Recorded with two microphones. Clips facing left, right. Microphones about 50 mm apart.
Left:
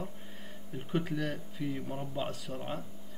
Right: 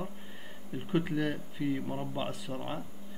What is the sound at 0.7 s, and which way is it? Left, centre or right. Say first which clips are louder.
Speech: right 3 dB; centre.